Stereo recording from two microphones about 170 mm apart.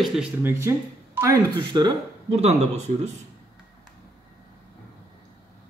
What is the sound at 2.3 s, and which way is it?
Speech, 40° right (ahead or behind).